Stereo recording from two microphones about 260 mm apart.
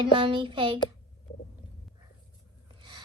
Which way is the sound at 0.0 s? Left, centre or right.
Centre.